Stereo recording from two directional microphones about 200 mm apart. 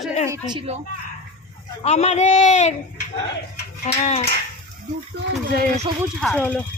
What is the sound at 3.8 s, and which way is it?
Speech, 35° left (ahead or behind).